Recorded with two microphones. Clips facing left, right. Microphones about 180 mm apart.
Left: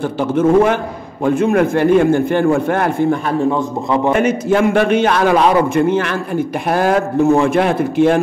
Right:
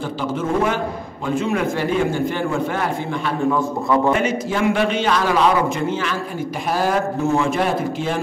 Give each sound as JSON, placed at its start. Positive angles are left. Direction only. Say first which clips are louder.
{"t": 0.2, "sound": "a man's voice", "louder": "left 9 dB", "side_deg": 60}
{"t": 3.4, "sound": "a man's voice", "louder": "left 2 dB", "side_deg": 20}
{"t": 4.1, "sound": "a man's voice", "louder": "left 6 dB", "side_deg": 55}